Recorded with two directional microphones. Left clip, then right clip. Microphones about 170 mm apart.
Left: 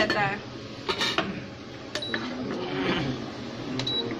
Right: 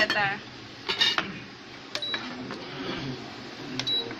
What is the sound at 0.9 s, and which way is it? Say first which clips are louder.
Dishes: right 3 dB; 20° left (ahead or behind).